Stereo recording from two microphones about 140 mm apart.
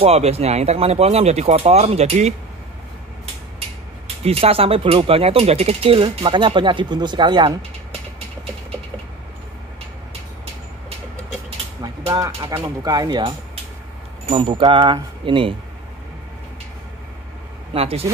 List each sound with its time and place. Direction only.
0.0 s speech: 50° right (ahead or behind)
4.2 s speech: 45° right (ahead or behind)
11.8 s a sound: 25° right (ahead or behind)
12.4 s speech: 20° right (ahead or behind)
14.3 s speech: 35° right (ahead or behind)
17.7 s speech: 45° right (ahead or behind)